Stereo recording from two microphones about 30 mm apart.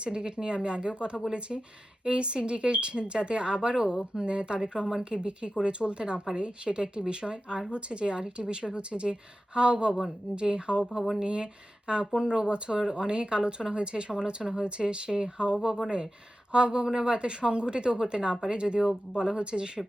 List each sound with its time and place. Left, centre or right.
0.0 s speech: right